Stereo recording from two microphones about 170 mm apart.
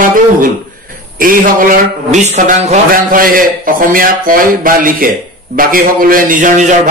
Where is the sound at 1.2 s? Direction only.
55° right (ahead or behind).